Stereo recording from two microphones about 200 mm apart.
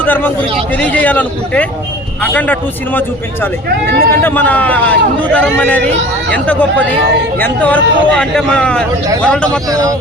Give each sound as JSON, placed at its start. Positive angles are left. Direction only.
{"t": 0.0, "sound": "a man's voice", "side_deg": 10}
{"t": 3.8, "sound": "speech", "side_deg": -50}
{"t": 4.1, "sound": "a man's voice", "side_deg": 10}